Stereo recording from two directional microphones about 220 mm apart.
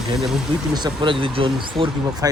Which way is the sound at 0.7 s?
20° right (ahead or behind).